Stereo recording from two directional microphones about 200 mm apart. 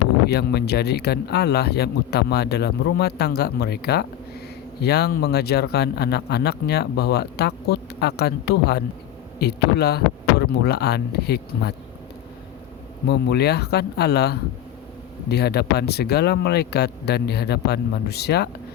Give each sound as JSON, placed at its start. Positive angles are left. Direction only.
{"t": 0.3, "sound": "speech", "side_deg": 55}
{"t": 13.1, "sound": "speech", "side_deg": 55}